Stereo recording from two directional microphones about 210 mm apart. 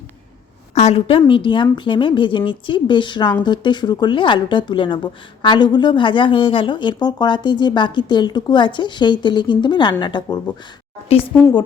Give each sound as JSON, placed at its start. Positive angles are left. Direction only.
{"t": 0.7, "sound": "speech", "side_deg": 30}